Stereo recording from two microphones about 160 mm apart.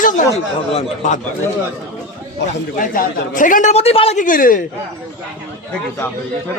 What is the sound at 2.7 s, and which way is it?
A man's voice, 60° left (ahead or behind).